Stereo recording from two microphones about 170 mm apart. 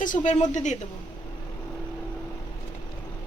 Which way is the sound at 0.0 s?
45° left (ahead or behind).